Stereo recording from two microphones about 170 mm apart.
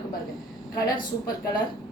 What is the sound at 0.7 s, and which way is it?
Speech, 20° left (ahead or behind).